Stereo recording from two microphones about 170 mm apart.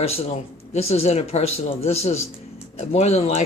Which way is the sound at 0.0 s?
35° left (ahead or behind).